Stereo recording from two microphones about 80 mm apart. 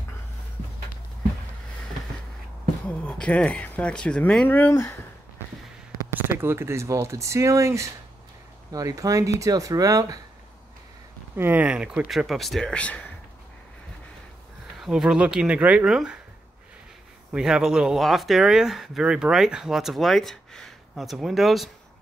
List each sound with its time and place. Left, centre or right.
3.1 s speech: centre
4.5 s speech: left
6.3 s speech: right
11.3 s speech: right
11.6 s speech: centre
12.1 s speech: centre
12.7 s speech: centre
14.8 s speech: centre
17.3 s speech: centre